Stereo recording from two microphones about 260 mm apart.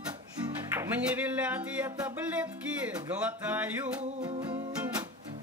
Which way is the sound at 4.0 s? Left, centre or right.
Centre.